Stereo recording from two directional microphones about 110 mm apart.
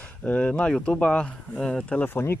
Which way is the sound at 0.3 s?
10° left (ahead or behind).